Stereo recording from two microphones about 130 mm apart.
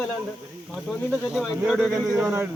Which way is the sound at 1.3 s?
5° right (ahead or behind).